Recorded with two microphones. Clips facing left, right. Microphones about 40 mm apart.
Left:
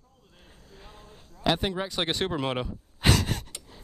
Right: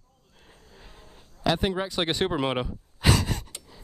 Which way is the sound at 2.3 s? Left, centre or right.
Centre.